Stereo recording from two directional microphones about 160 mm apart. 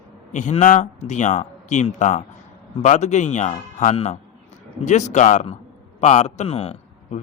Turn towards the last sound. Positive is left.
turn(degrees=40)  # may be behind; listen again after turning